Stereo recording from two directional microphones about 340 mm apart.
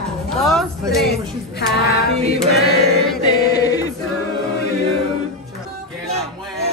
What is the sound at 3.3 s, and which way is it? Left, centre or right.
Speech, centre.